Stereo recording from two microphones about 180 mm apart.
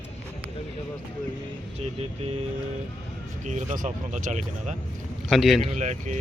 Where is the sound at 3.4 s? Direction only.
45° right (ahead or behind).